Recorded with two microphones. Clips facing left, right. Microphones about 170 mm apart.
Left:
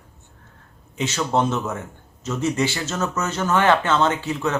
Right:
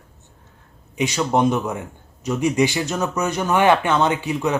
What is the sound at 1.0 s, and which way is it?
Speech, 15° right (ahead or behind).